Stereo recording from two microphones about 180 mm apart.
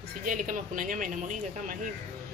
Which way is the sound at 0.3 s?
50° right (ahead or behind).